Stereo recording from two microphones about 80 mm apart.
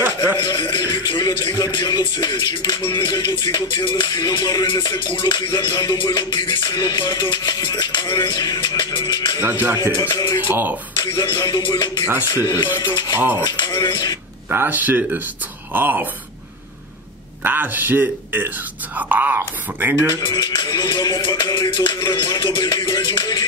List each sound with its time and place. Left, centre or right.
0.0 s music: right
0.4 s music: left
9.4 s speech: right
10.1 s speech: left
10.5 s speech: right
11.0 s music: left
12.4 s music: left
12.8 s speech: left
13.4 s music: left
14.5 s speech: right
17.4 s speech: right
20.2 s music: left